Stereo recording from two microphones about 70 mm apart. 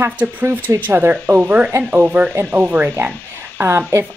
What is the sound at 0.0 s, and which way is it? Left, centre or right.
Speech, right.